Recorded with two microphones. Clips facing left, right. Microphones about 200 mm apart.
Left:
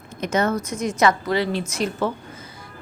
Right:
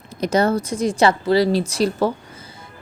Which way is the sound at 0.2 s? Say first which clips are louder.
Right 4 dB; 35° right (ahead or behind).